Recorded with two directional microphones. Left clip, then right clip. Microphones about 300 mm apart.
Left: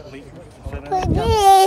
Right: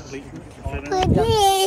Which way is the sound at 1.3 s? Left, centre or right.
Centre.